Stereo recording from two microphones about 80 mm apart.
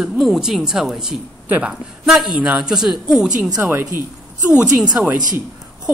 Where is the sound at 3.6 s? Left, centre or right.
Right.